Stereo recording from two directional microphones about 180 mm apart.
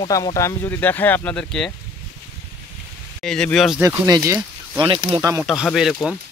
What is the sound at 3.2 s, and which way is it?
Speech, 5° left (ahead or behind).